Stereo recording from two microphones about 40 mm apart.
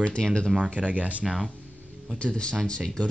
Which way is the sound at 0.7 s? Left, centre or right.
Right.